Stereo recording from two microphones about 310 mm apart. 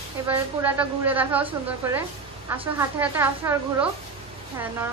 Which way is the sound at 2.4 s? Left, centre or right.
Centre.